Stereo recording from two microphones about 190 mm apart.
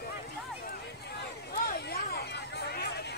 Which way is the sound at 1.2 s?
60° left (ahead or behind).